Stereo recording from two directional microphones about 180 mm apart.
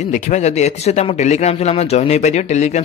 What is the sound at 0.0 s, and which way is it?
Speech, 45° left (ahead or behind).